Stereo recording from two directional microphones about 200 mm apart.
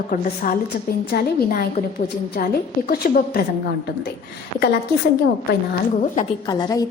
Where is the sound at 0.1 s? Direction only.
45° left (ahead or behind).